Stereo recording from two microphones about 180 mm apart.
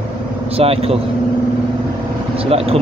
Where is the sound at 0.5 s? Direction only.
35° right (ahead or behind).